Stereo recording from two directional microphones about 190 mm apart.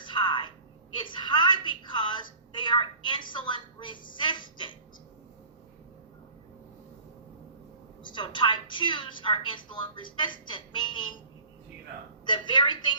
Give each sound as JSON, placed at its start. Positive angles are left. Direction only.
{"t": 0.0, "sound": "a sound", "side_deg": 25}
{"t": 8.0, "sound": "a woman's voice", "side_deg": 25}
{"t": 12.2, "sound": "a woman's voice", "side_deg": 25}